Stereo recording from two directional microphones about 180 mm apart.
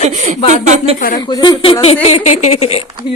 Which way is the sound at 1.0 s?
50° left (ahead or behind).